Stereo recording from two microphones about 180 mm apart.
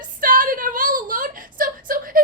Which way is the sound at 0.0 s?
50° right (ahead or behind).